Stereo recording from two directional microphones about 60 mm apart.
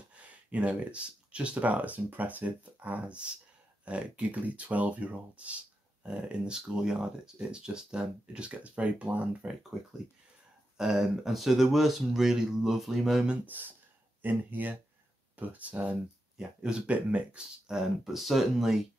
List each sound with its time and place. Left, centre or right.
0.1 s speech: right
10.8 s speech: centre
13.5 s speech: right
17.6 s speech: centre